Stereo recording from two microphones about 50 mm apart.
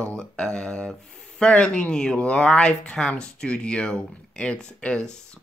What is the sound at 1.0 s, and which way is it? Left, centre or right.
Speech, centre.